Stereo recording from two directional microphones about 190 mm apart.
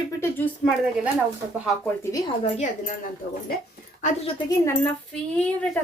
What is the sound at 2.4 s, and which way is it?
A woman's voice, 40° left (ahead or behind).